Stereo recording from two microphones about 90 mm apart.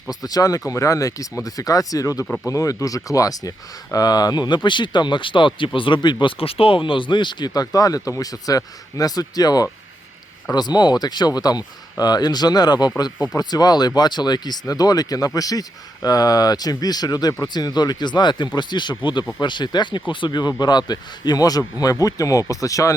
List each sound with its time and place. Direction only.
0.1 s speech: 45° left (ahead or behind)